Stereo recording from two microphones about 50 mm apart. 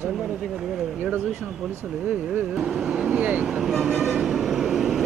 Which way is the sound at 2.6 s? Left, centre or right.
Centre.